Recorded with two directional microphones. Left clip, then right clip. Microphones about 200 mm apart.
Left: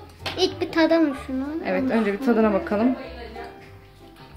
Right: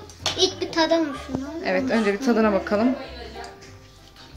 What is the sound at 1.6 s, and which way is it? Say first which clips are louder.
Speech: right 1 dB; centre (ahead or behind).